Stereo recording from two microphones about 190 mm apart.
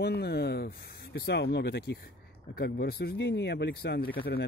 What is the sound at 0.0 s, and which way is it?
Speech, 60° left (ahead or behind).